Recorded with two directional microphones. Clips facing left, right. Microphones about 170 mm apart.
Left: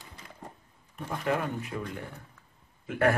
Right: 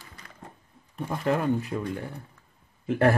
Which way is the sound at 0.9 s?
35° right (ahead or behind).